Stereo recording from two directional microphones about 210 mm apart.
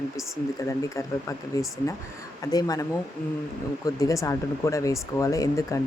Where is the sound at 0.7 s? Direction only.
15° left (ahead or behind).